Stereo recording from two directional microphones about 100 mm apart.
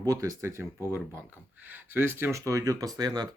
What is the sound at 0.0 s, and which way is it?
Speech, 35° right (ahead or behind).